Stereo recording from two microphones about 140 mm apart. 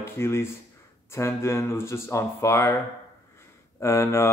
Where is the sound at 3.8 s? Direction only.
20° left (ahead or behind).